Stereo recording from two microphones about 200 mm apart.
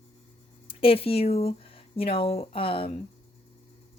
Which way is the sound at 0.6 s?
25° left (ahead or behind).